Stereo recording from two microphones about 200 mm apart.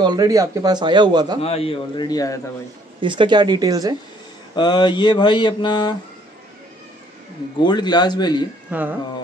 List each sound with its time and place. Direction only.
0.0 s a man's voice: 20° right (ahead or behind)
1.4 s mantra: 30° left (ahead or behind)
3.0 s a man's voice: 25° right (ahead or behind)
4.6 s mantra: 20° left (ahead or behind)
7.6 s mantra: 20° left (ahead or behind)
8.6 s speech: 10° right (ahead or behind)